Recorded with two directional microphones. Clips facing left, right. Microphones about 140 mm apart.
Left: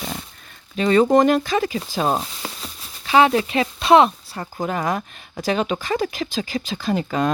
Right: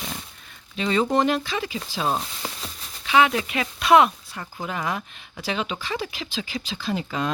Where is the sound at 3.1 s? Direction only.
35° left (ahead or behind).